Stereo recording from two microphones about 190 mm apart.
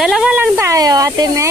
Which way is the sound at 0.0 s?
Centre (ahead or behind).